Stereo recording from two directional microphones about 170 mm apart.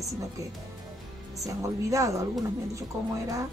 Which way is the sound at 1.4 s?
20° right (ahead or behind).